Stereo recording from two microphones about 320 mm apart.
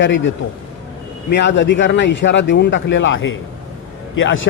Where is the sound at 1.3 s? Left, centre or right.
Left.